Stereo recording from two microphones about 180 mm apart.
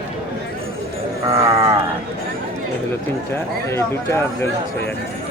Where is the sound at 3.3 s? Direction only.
15° left (ahead or behind).